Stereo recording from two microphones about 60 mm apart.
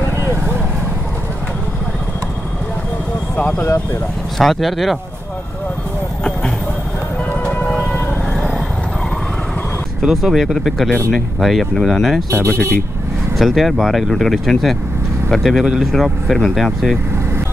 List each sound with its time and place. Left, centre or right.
3.3 s speech: left
4.4 s speech: centre
10.0 s speech: centre
12.4 s speech: left
13.4 s speech: centre
15.5 s speech: centre
15.9 s speech: centre